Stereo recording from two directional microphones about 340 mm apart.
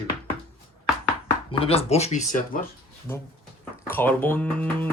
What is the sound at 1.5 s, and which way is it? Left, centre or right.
Speech, centre.